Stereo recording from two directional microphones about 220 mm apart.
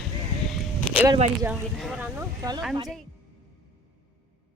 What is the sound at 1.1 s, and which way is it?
Speech, 20° right (ahead or behind).